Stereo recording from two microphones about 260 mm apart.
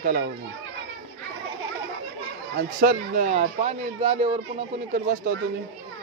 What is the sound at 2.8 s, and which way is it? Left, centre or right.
Speech, right.